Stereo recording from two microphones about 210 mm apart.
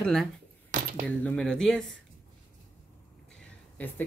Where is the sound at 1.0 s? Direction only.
5° left (ahead or behind).